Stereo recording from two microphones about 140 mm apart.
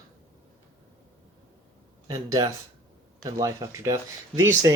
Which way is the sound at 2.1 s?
25° right (ahead or behind).